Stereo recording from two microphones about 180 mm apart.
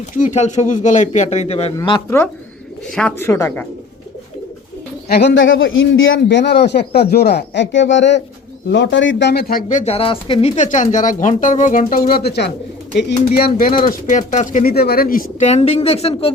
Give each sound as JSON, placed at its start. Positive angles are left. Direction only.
{"t": 0.2, "sound": "speech", "side_deg": 40}
{"t": 2.0, "sound": "speech", "side_deg": 15}
{"t": 5.0, "sound": "a man's voice", "side_deg": 65}
{"t": 13.7, "sound": "speech", "side_deg": 30}
{"t": 13.9, "sound": "speech", "side_deg": 45}
{"t": 15.4, "sound": "speech", "side_deg": 35}